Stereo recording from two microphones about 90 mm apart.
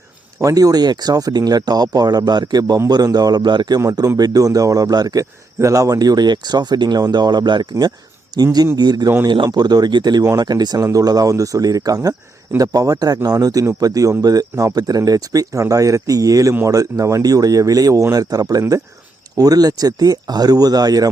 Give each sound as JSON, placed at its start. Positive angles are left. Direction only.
{"t": 0.3, "sound": "speech", "side_deg": -40}
{"t": 4.2, "sound": "speech", "side_deg": -45}